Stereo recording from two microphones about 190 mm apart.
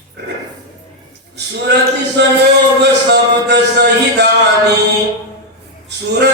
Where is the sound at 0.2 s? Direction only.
60° right (ahead or behind).